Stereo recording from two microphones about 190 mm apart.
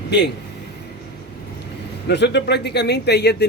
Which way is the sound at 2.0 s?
65° left (ahead or behind).